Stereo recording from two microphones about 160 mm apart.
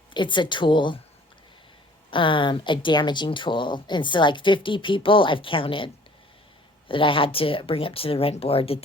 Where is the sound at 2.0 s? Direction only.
30° left (ahead or behind).